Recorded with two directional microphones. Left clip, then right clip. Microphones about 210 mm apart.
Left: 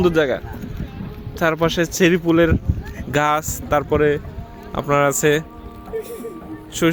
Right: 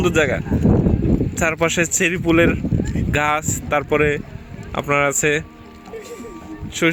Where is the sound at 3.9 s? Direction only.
10° right (ahead or behind).